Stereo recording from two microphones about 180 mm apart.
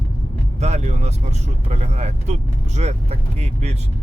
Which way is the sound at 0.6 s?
40° right (ahead or behind).